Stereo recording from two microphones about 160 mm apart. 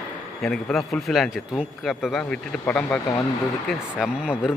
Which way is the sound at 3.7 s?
5° right (ahead or behind).